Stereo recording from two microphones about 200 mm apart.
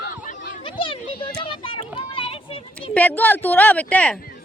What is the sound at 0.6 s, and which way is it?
A child's voice, 25° left (ahead or behind).